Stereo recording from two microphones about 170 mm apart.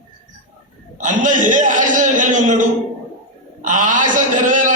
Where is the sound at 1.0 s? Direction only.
50° right (ahead or behind).